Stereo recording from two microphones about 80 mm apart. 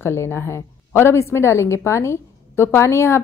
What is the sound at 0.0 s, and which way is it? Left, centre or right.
A woman's voice, left.